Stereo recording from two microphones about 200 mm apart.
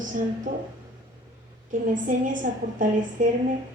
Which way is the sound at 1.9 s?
40° right (ahead or behind).